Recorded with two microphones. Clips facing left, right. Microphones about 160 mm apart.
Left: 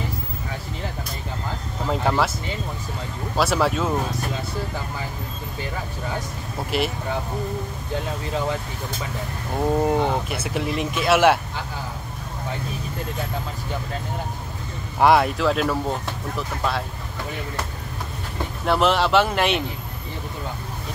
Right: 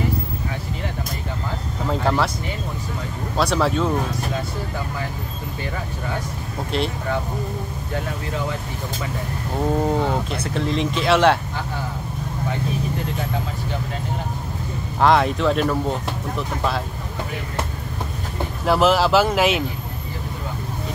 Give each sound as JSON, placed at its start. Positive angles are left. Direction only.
{"t": 1.9, "sound": "speech", "side_deg": 5}
{"t": 3.3, "sound": "speech", "side_deg": 5}
{"t": 6.7, "sound": "speech", "side_deg": 5}
{"t": 9.8, "sound": "speech", "side_deg": 10}
{"t": 15.0, "sound": "speech", "side_deg": 10}
{"t": 18.7, "sound": "speech", "side_deg": 0}